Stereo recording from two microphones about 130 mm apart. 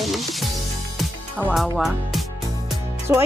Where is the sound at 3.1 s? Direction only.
20° right (ahead or behind).